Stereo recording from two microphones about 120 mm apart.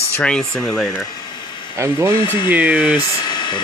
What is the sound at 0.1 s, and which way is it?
Speech, 10° left (ahead or behind).